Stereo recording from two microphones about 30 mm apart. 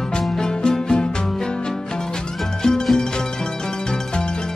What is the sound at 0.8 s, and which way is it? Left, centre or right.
Music, left.